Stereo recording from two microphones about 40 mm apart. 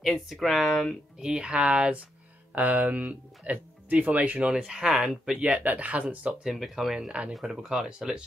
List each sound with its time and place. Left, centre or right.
0.0 s speech: centre
1.4 s speech: right
2.5 s speech: right
4.6 s speech: centre
5.4 s speech: right
6.5 s speech: centre
7.1 s speech: right
7.4 s speech: centre